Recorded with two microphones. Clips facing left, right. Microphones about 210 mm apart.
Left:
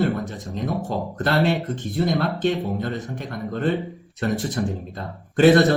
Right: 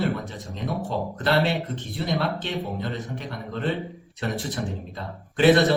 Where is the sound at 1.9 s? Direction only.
50° left (ahead or behind).